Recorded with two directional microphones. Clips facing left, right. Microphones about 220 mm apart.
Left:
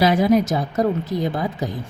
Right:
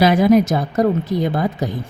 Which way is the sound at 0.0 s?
65° right (ahead or behind).